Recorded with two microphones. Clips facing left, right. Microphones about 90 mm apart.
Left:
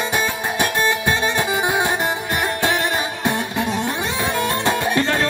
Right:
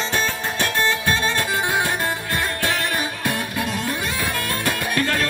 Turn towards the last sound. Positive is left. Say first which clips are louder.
# left 3 dB
turn(degrees=20)  # may be behind; listen again after turning